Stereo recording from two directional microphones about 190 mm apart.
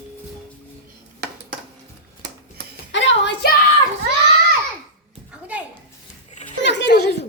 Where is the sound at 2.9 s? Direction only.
70° left (ahead or behind).